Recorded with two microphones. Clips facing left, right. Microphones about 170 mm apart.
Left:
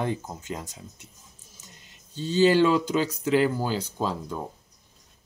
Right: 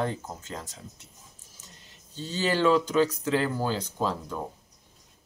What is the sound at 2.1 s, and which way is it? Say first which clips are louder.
Speech: left 8 dB; 20° left (ahead or behind).